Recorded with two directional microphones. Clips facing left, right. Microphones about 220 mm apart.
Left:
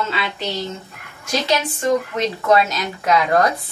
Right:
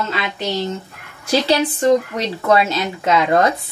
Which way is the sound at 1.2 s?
35° right (ahead or behind).